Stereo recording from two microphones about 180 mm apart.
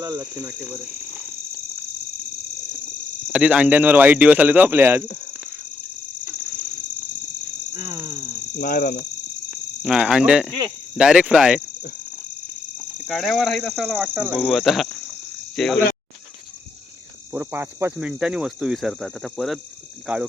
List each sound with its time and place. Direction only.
0.0 s speech: 20° right (ahead or behind)
3.3 s speech: 5° right (ahead or behind)
7.7 s a sound: 25° right (ahead or behind)
8.5 s speech: 60° left (ahead or behind)
9.5 s speech: 5° right (ahead or behind)
13.0 s speech: centre (ahead or behind)
17.3 s speech: 10° right (ahead or behind)